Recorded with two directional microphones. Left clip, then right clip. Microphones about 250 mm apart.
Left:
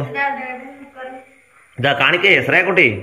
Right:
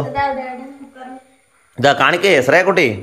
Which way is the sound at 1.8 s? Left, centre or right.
Right.